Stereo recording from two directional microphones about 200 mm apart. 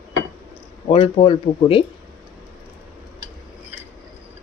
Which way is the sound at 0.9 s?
25° left (ahead or behind).